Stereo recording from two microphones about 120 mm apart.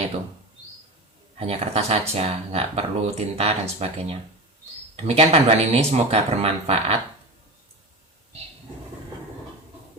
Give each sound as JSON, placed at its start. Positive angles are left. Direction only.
{"t": 1.4, "sound": "speech", "side_deg": -60}